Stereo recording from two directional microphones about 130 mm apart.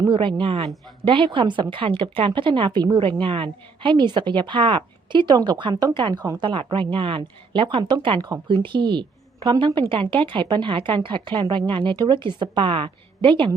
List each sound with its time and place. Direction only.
0.1 s a woman's voice: 40° right (ahead or behind)